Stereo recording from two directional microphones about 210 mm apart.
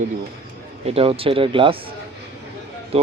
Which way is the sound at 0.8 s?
25° right (ahead or behind).